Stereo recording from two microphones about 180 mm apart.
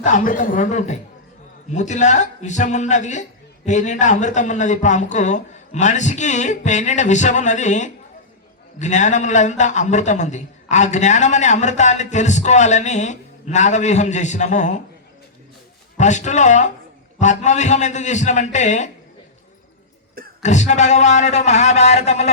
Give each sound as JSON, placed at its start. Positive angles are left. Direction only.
{"t": 0.0, "sound": "a man's voice", "side_deg": 45}
{"t": 16.0, "sound": "a man's voice", "side_deg": 40}
{"t": 20.4, "sound": "a man's voice", "side_deg": 40}